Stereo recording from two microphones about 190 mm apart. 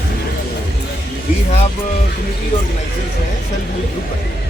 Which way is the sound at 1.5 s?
35° left (ahead or behind).